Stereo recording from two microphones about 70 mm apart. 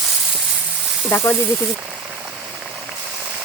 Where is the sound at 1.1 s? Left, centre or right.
Left.